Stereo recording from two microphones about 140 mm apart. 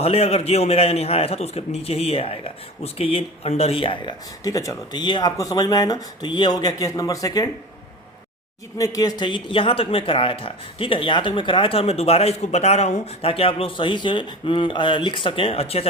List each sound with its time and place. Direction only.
0.0 s a man's voice: 45° left (ahead or behind)
4.4 s speech: 25° left (ahead or behind)
8.8 s speech: 25° left (ahead or behind); by 15.9 s 45° left (ahead or behind)